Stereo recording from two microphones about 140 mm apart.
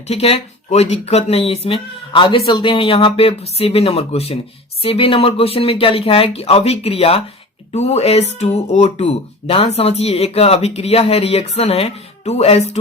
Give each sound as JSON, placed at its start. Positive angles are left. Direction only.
{"t": 0.1, "sound": "speech", "side_deg": 45}